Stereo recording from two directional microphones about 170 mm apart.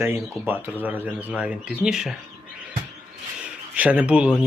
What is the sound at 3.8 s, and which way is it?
Speech, 10° right (ahead or behind).